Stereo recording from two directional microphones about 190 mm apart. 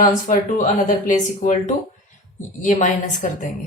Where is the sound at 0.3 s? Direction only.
45° left (ahead or behind).